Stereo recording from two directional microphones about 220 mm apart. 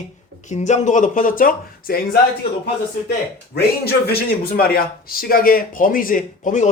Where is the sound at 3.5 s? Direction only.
45° left (ahead or behind).